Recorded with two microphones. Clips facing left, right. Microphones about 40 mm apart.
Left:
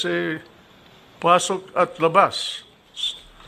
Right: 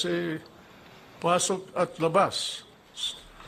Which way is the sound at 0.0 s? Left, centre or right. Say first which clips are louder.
Left 5 dB; left.